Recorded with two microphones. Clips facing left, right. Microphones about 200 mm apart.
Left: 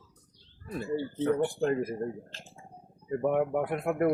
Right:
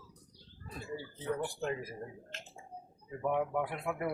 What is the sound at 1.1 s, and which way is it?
Speech, 65° left (ahead or behind).